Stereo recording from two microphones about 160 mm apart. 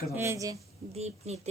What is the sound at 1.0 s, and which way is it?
Speech, 40° right (ahead or behind).